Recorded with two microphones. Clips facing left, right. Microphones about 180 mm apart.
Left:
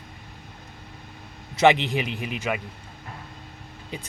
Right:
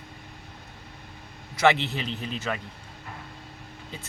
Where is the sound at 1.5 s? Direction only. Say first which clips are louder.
Left 4 dB; 15° left (ahead or behind).